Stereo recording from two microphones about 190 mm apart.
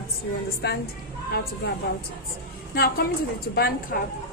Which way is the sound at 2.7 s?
50° left (ahead or behind).